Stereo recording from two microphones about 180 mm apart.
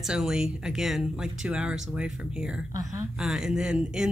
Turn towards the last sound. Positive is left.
turn(degrees=-5)  # may be behind; listen again after turning